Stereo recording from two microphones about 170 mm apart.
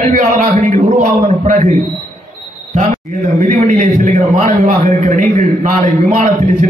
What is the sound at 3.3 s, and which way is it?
A man's voice, 40° right (ahead or behind).